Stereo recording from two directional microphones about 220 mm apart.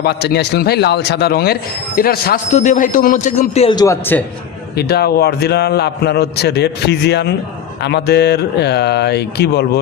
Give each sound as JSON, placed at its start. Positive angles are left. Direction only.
{"t": 0.0, "sound": "a man's voice", "side_deg": 50}
{"t": 4.8, "sound": "a man's voice", "side_deg": 45}